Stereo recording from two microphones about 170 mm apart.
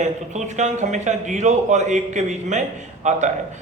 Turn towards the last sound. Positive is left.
turn(degrees=-45)  # may be behind; listen again after turning